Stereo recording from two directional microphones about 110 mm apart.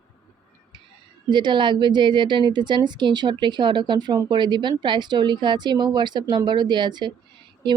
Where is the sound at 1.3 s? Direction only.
45° right (ahead or behind).